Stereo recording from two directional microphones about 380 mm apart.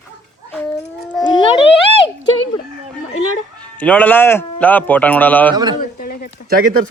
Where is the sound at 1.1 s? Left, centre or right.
Centre.